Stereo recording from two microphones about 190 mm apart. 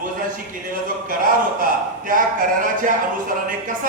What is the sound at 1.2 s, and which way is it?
A man's voice, 45° right (ahead or behind).